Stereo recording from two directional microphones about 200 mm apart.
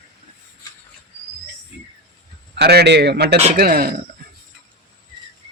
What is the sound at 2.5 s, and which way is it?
A man's voice, 55° right (ahead or behind).